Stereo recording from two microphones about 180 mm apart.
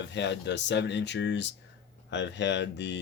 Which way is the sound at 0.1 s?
75° left (ahead or behind).